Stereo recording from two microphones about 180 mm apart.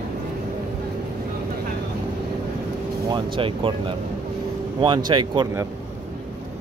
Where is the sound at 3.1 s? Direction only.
25° right (ahead or behind).